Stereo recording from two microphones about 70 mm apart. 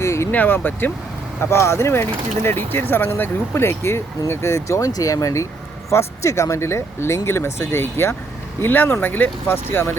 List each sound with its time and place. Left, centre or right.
0.0 s a sound: left
0.3 s speech: left
1.4 s speech: left
4.9 s speech: left